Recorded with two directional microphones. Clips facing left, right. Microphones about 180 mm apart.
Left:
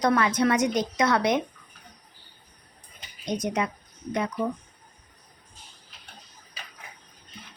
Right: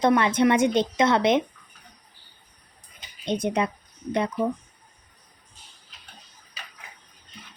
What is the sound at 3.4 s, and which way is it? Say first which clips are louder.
Speech: right 3 dB; 30° right (ahead or behind).